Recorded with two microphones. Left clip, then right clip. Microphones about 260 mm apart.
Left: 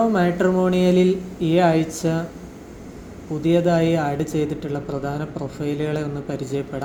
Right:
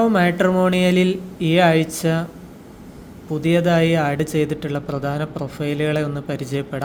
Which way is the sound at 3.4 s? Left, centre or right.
Right.